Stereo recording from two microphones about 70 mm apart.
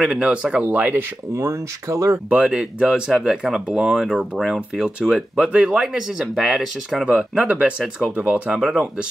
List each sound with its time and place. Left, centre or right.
0.0 s speech: centre
0.7 s speech: right
1.3 s speech: right
2.3 s speech: centre
7.3 s speech: right